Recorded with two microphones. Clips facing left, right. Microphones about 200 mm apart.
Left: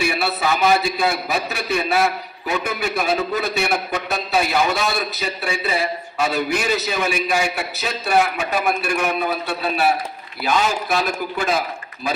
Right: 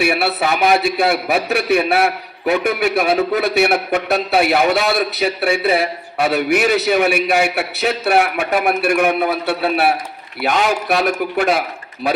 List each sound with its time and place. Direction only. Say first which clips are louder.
0.0 s a man's voice: right 4 dB; 65° right (ahead or behind)